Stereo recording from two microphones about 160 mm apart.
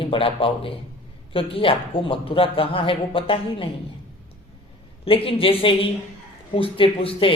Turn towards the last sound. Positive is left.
turn(degrees=35)  # may be behind; listen again after turning